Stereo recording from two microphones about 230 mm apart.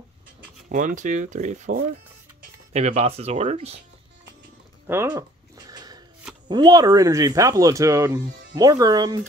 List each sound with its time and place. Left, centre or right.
0.7 s speech: right
4.8 s a sound: centre
6.4 s speech: centre